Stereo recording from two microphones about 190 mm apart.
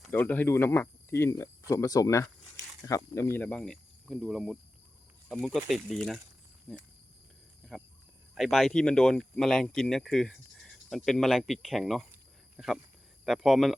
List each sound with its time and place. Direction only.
0.1 s speech: 10° left (ahead or behind)
8.4 s speech: centre (ahead or behind)